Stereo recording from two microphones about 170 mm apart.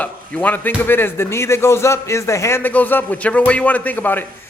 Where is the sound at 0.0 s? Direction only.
10° left (ahead or behind).